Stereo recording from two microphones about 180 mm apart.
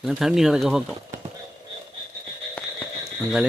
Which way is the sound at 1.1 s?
45° right (ahead or behind).